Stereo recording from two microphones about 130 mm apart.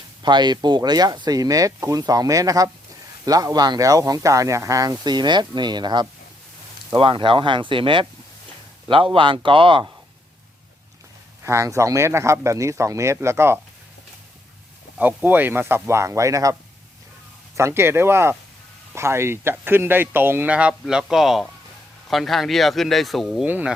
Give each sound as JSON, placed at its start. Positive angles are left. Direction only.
{"t": 0.2, "sound": "speech", "side_deg": -35}
{"t": 11.4, "sound": "speech", "side_deg": -20}
{"t": 14.9, "sound": "speech", "side_deg": -15}
{"t": 17.6, "sound": "speech", "side_deg": -20}
{"t": 23.5, "sound": "speech", "side_deg": -15}